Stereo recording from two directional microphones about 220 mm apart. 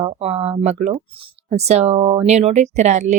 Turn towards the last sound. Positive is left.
turn(degrees=-30)  # may be behind; listen again after turning